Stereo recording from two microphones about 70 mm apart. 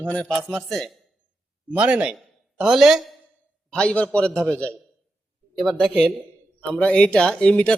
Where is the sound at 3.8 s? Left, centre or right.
Centre.